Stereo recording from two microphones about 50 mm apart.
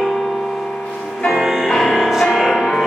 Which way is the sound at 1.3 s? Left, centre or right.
Centre.